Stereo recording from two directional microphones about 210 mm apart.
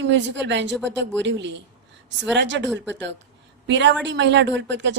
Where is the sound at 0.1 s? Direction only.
55° right (ahead or behind).